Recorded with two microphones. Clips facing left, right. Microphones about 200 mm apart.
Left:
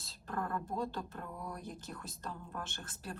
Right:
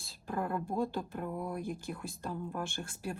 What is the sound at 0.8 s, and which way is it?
Speech, 10° right (ahead or behind).